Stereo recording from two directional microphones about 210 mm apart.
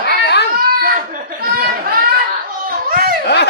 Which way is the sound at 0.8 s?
45° right (ahead or behind).